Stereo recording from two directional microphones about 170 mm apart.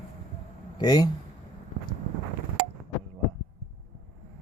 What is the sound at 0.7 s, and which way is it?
Speech, 25° left (ahead or behind).